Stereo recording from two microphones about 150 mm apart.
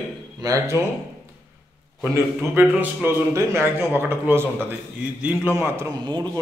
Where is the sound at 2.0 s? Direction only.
15° right (ahead or behind).